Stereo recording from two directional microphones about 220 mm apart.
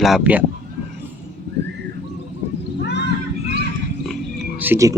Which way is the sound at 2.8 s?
50° left (ahead or behind).